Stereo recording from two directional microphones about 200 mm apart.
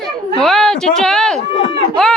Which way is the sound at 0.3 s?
5° left (ahead or behind).